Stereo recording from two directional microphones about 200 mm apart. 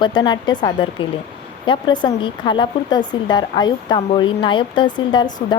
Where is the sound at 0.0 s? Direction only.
20° left (ahead or behind).